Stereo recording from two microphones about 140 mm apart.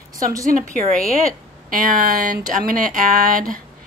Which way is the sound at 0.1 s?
25° right (ahead or behind).